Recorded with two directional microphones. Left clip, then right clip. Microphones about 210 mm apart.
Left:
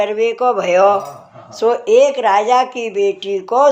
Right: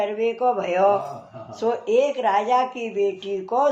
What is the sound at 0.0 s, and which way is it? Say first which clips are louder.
Speech: left 7 dB; 40° left (ahead or behind).